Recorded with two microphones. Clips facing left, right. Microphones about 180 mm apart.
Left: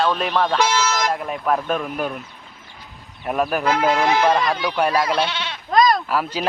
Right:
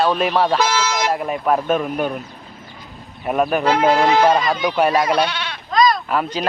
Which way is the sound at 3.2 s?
Centre (ahead or behind).